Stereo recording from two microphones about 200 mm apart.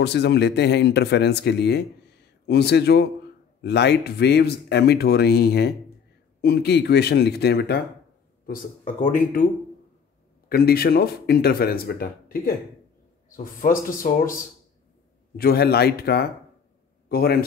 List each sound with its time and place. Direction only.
0.0 s speech: 55° left (ahead or behind)
8.5 s speech: 45° left (ahead or behind)
10.5 s speech: 50° left (ahead or behind)